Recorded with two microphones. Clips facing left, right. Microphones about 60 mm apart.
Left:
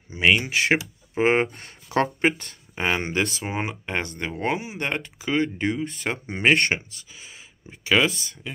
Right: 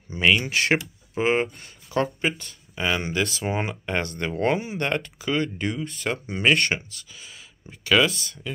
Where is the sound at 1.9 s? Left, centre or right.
Left.